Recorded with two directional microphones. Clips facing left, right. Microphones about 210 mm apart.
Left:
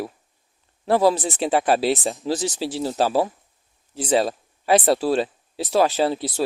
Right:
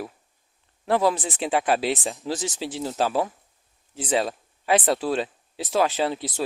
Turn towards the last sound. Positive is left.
turn(degrees=35)  # may be behind; listen again after turning